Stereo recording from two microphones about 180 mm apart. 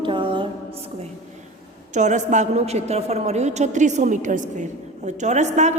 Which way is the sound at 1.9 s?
40° right (ahead or behind).